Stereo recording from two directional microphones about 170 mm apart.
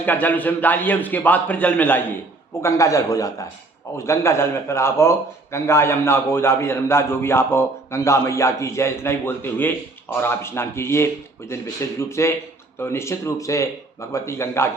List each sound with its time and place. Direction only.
0.0 s a man's voice: 10° left (ahead or behind)